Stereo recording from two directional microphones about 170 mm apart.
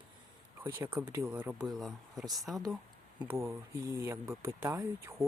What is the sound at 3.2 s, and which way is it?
Speech, 15° right (ahead or behind).